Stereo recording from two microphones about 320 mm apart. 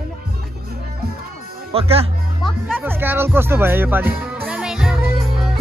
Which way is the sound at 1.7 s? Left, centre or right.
Centre.